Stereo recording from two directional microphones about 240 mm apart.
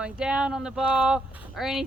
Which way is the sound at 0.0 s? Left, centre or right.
Centre.